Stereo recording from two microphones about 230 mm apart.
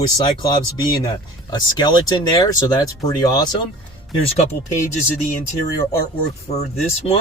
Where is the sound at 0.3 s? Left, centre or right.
Centre.